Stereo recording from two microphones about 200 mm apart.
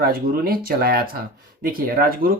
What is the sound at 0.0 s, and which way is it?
Speech, 45° right (ahead or behind).